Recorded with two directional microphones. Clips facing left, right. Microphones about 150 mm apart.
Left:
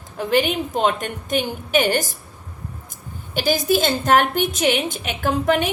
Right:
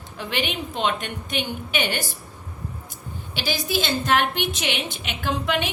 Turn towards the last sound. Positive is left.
turn(degrees=45)  # may be behind; listen again after turning